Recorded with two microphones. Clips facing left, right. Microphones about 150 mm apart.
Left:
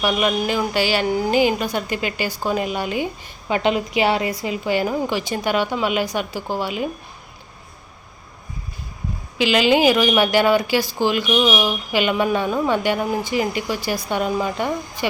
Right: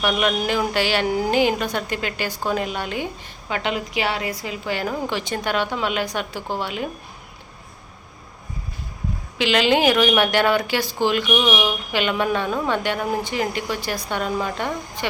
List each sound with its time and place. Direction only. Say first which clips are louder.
0.0 s speech: left 1 dB; 5° left (ahead or behind)
3.5 s a woman's voice: left 5 dB; 20° left (ahead or behind)
9.4 s a woman's voice: left 2 dB; 5° left (ahead or behind)